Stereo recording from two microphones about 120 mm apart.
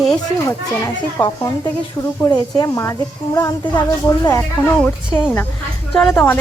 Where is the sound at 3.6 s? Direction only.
40° left (ahead or behind).